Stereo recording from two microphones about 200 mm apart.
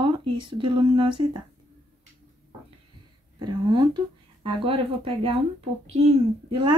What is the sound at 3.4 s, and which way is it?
A child's voice, 20° right (ahead or behind).